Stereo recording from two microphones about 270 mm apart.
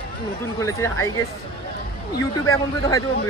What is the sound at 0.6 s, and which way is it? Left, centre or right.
Speech, centre.